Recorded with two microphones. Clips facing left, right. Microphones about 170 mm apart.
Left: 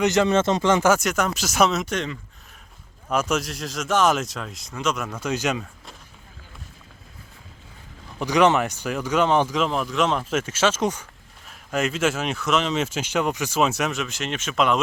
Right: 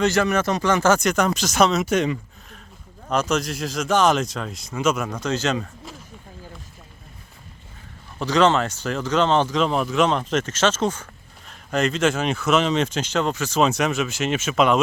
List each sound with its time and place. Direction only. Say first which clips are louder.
0.0 s speech: left 1 dB; 20° left (ahead or behind)
0.9 s speech: right 2 dB; 5° left (ahead or behind)
1.8 s speech: right 6 dB; 10° right (ahead or behind)
3.1 s speech: right 1 dB; 5° left (ahead or behind)
8.2 s speech: even; 15° left (ahead or behind)
9.6 s speech: right 3 dB; centre (ahead or behind)